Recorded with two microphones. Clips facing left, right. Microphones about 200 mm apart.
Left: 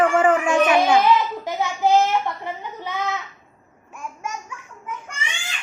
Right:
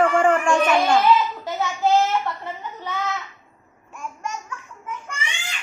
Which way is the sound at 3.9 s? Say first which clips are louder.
Even; 10° left (ahead or behind).